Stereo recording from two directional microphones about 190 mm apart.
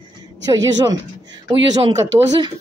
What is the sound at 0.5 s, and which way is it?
A man's voice, 20° right (ahead or behind).